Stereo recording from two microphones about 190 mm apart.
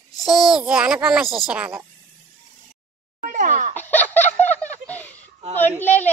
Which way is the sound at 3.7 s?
10° left (ahead or behind).